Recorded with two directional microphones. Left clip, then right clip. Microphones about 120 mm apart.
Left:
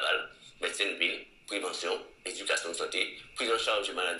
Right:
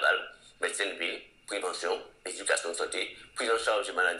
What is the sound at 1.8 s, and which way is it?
A man's voice, 40° right (ahead or behind).